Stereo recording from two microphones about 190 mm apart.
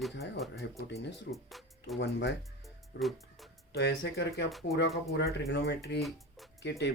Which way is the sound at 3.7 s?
60° left (ahead or behind).